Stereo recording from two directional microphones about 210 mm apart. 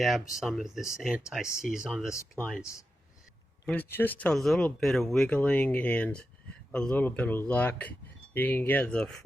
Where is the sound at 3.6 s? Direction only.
10° left (ahead or behind).